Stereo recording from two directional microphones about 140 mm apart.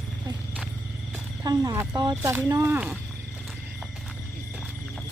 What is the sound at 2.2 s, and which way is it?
Speech, 15° right (ahead or behind).